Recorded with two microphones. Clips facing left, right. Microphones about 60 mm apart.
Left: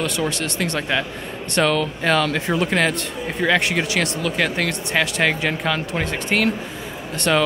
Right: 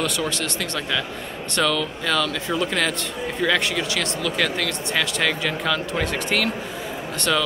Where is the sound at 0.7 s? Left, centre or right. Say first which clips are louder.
Left 3 dB; left.